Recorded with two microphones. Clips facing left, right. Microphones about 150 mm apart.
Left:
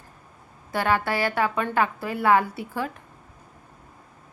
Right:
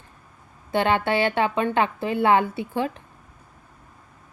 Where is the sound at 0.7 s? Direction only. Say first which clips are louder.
Right 3 dB; 25° right (ahead or behind).